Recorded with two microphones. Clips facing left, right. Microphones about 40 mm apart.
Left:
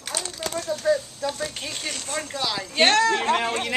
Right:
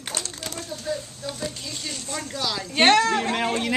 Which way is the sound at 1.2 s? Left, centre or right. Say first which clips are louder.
Left 2 dB; left.